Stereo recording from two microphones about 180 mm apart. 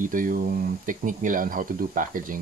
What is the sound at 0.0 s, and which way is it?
Speech, 50° right (ahead or behind).